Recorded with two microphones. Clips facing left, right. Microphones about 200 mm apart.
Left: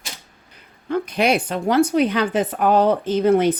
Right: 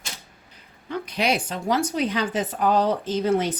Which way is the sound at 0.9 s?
55° left (ahead or behind).